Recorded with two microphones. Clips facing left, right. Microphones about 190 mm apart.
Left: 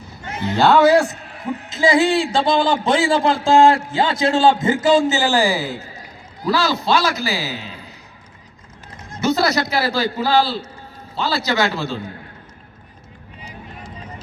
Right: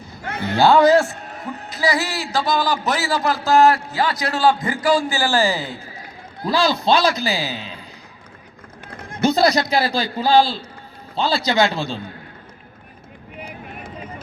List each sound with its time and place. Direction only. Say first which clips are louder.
0.3 s a sound: left 1 dB; 60° right (ahead or behind)
0.6 s a man's voice: even; 5° left (ahead or behind)
1.7 s a man's voice: left 7 dB; 25° left (ahead or behind); by 5.7 s 10° left (ahead or behind)
6.5 s a man's voice: right 1 dB; 15° right (ahead or behind)
8.9 s run: right 2 dB; 60° right (ahead or behind)
9.2 s a man's voice: right 2 dB; 15° right (ahead or behind)